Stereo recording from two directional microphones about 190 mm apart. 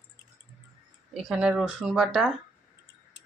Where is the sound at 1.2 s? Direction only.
Centre (ahead or behind).